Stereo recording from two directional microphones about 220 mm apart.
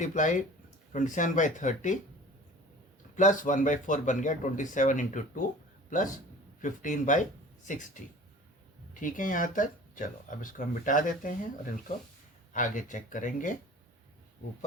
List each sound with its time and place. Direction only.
0.0 s speech: 35° left (ahead or behind)
3.2 s speech: 35° left (ahead or behind)